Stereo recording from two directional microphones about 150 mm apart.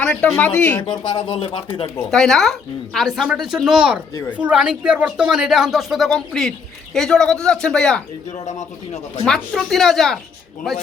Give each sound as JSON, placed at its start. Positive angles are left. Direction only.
{"t": 0.0, "sound": "speech", "side_deg": 5}
{"t": 0.8, "sound": "speech", "side_deg": 30}
{"t": 2.0, "sound": "speech", "side_deg": 5}
{"t": 8.4, "sound": "speech", "side_deg": 50}
{"t": 9.2, "sound": "speech", "side_deg": 5}